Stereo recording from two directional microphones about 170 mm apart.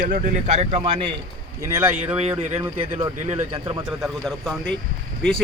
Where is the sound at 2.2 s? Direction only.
35° right (ahead or behind).